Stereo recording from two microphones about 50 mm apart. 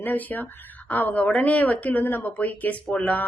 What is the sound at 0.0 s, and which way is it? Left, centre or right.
Speech, left.